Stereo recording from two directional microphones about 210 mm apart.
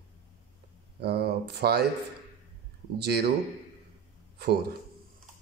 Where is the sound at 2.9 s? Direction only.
50° right (ahead or behind).